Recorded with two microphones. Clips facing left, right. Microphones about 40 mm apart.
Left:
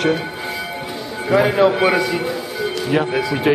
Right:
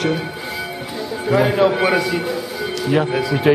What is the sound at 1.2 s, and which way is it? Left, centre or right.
A man's voice, centre.